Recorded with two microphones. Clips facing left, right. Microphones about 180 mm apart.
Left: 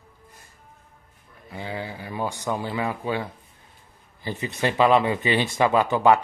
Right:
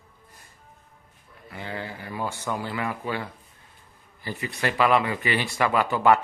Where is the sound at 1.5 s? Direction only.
15° left (ahead or behind).